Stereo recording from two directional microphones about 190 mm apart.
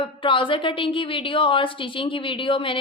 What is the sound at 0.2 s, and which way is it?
A woman's voice, 25° left (ahead or behind).